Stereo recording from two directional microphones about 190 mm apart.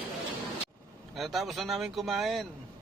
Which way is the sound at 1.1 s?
Centre (ahead or behind).